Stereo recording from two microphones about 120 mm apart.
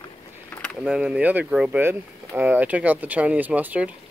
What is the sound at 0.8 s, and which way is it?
Speech, 5° right (ahead or behind).